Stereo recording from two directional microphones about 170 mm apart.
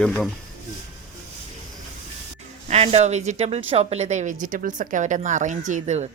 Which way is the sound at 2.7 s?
40° right (ahead or behind).